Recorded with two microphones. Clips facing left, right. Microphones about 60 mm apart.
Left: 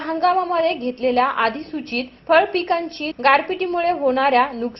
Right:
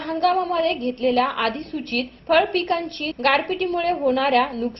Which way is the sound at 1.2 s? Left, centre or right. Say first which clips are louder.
Left 4 dB; left.